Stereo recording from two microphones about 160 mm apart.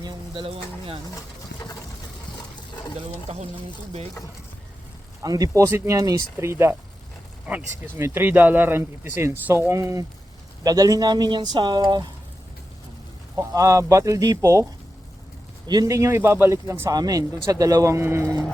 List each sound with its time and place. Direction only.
0.0 s speech: 30° right (ahead or behind)
1.1 s pigeon: 25° left (ahead or behind)
5.2 s speech: 20° right (ahead or behind)
13.3 s speech: 20° right (ahead or behind)